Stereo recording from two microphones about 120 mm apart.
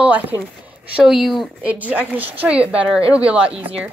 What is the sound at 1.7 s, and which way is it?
Speech, 10° right (ahead or behind).